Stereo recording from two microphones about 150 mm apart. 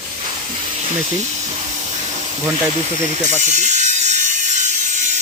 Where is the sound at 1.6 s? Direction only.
50° right (ahead or behind).